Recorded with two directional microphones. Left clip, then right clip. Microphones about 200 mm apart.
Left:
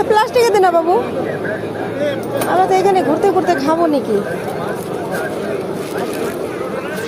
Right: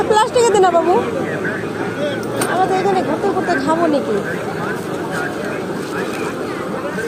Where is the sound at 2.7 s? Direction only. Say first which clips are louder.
Left 3 dB; 30° left (ahead or behind).